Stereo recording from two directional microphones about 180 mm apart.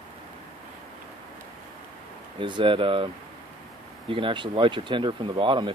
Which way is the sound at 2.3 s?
25° right (ahead or behind).